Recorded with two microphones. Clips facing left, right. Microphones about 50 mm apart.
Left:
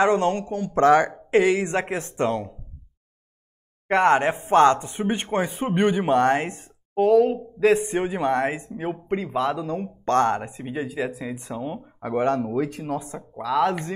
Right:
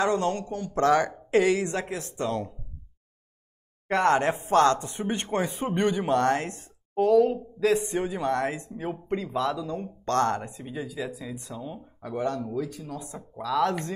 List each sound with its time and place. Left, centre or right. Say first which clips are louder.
0.0 s speech: left 5 dB; left
1.8 s speech: left 6 dB; left
3.8 s speech: left 4 dB; left
13.4 s speech: left 3 dB; left